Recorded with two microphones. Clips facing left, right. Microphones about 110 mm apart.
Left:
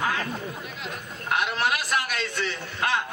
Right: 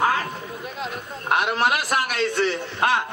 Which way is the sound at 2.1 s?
30° right (ahead or behind).